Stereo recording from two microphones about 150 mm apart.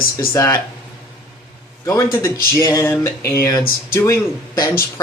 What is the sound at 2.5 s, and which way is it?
Speech, 20° left (ahead or behind).